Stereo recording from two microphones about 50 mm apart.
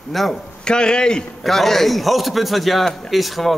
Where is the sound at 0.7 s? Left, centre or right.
Centre.